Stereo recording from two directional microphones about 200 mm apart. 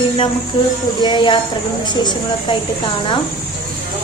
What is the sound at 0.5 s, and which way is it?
Speech, 25° left (ahead or behind).